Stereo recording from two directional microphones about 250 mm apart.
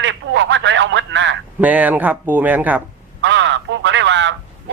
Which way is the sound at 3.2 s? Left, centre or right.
Right.